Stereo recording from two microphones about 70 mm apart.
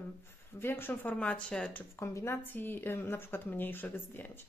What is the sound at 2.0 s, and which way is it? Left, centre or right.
Speech, left.